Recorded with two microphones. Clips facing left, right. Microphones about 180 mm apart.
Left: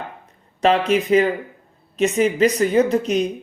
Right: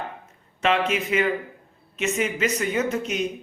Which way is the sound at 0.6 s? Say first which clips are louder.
Left 6 dB; 35° left (ahead or behind).